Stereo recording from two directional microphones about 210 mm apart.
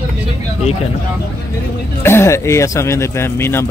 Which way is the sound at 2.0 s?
10° left (ahead or behind).